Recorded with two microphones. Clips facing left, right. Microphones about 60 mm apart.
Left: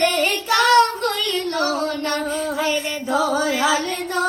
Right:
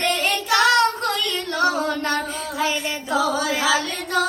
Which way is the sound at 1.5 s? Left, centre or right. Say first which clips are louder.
Right 4 dB; centre.